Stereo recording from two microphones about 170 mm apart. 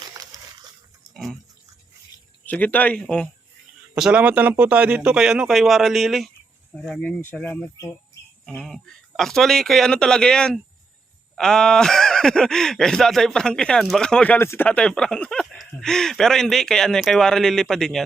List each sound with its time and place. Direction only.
1.1 s speech: centre (ahead or behind)
2.5 s speech: 10° left (ahead or behind)
3.9 s speech: 5° right (ahead or behind)